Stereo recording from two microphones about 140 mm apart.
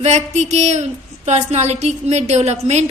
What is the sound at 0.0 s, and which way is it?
A woman's voice, 55° right (ahead or behind).